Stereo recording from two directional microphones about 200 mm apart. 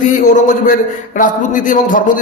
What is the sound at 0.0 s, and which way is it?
A man's voice, 40° left (ahead or behind).